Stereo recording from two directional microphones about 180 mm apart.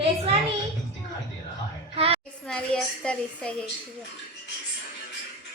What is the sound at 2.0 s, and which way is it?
Speech, 30° right (ahead or behind).